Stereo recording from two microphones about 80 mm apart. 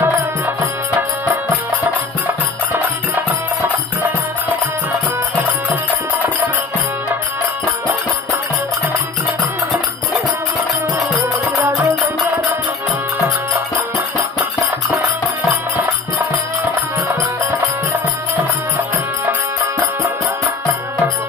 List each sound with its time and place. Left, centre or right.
0.0 s music: right
2.7 s music: right
11.7 s music: right
19.8 s music: right